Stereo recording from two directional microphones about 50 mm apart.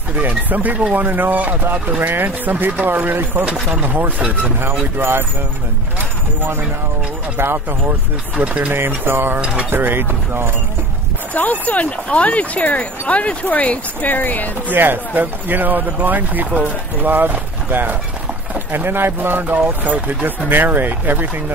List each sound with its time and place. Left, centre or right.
0.5 s speech: right
7.3 s speech: right
8.4 s speech: right
8.7 s speech: right
11.6 s speech: left
14.7 s speech: right